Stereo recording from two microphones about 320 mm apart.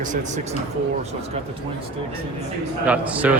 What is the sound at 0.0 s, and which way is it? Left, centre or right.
Speech, right.